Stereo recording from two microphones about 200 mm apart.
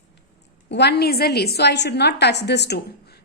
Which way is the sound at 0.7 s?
55° left (ahead or behind).